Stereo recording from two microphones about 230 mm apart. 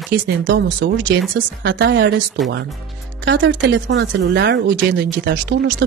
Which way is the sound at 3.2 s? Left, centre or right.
Right.